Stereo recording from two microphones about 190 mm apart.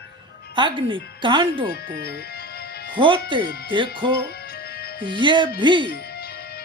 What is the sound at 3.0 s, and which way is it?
Speech, 25° right (ahead or behind).